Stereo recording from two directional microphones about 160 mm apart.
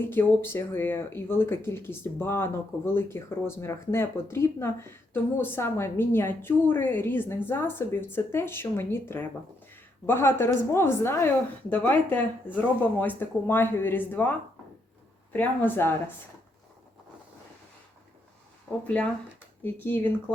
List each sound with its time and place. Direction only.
0.0 s speech: 15° left (ahead or behind)
19.6 s speech: 10° left (ahead or behind)